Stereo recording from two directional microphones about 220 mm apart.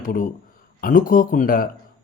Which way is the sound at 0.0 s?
40° left (ahead or behind).